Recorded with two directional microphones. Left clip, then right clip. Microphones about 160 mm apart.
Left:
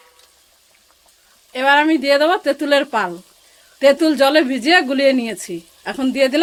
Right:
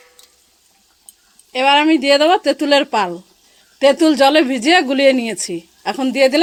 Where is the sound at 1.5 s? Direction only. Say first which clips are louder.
Right 1 dB; 25° right (ahead or behind).